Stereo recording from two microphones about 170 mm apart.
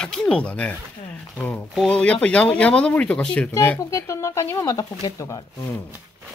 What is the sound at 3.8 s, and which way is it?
Speech, 20° left (ahead or behind).